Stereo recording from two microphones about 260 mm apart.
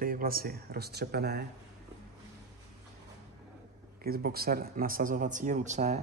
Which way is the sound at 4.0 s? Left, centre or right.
Right.